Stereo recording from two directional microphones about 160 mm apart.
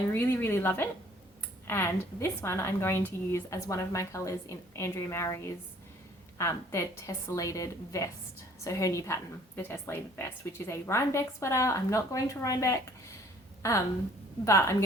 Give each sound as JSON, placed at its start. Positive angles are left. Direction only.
{"t": 0.1, "sound": "a woman's voice", "side_deg": 15}